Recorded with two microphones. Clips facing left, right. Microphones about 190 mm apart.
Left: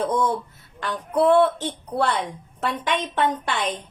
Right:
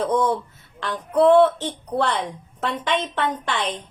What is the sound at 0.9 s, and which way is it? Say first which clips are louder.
A woman's voice: right 3 dB; 10° left (ahead or behind).